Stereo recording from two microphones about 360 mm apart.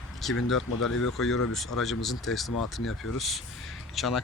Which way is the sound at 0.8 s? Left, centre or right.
Left.